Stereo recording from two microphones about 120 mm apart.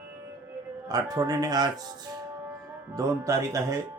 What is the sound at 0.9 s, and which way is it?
Speech, 30° right (ahead or behind).